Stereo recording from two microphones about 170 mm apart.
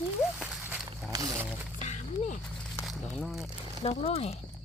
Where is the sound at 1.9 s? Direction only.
45° left (ahead or behind).